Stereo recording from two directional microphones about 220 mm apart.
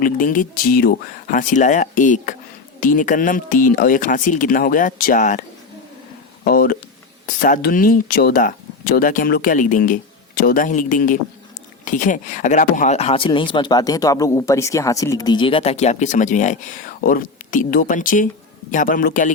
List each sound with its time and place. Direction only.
0.0 s speech: 40° left (ahead or behind)
6.4 s speech: 40° left (ahead or behind)